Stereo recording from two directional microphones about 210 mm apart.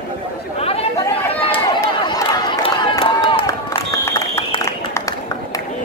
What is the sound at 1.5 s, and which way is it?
Run, 20° left (ahead or behind).